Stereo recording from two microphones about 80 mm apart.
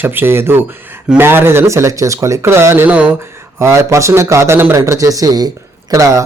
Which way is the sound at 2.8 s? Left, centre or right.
Centre.